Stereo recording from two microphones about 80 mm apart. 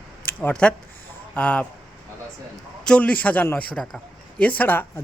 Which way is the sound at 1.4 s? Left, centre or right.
Centre.